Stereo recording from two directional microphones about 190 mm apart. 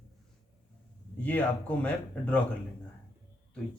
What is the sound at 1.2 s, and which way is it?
Speech, 10° left (ahead or behind).